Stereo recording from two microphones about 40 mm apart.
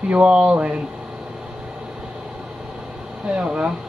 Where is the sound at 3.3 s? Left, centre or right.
Right.